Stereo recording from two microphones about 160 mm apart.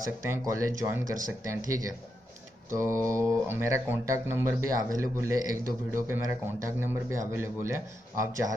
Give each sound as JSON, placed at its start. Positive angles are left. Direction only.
{"t": 0.2, "sound": "speech", "side_deg": -20}